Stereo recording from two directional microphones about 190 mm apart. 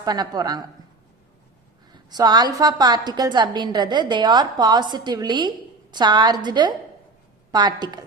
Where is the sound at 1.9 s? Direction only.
20° right (ahead or behind).